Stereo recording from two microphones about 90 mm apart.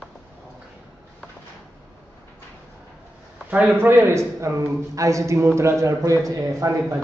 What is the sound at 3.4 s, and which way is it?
A man's voice, 20° right (ahead or behind).